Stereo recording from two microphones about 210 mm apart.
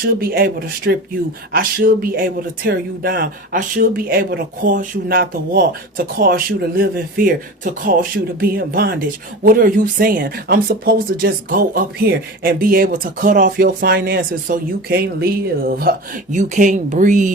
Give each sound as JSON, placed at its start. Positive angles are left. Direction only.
{"t": 0.0, "sound": "speech", "side_deg": -45}